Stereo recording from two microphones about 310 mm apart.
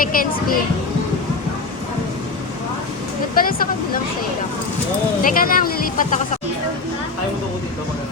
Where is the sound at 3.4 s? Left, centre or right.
Left.